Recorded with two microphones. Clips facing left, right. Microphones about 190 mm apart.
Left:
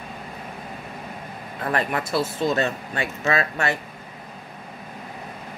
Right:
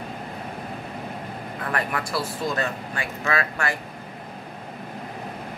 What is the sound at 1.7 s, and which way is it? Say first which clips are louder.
Speech: left 4 dB; 25° left (ahead or behind).